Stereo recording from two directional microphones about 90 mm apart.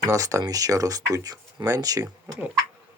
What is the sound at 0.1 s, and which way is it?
Speech, 35° right (ahead or behind).